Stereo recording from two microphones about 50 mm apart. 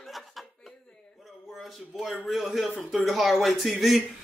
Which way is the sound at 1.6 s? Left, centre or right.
Centre.